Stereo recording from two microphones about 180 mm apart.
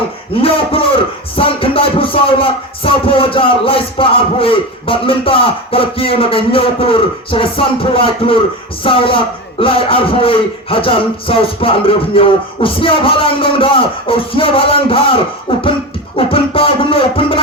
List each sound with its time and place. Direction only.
0.4 s speech: 30° left (ahead or behind)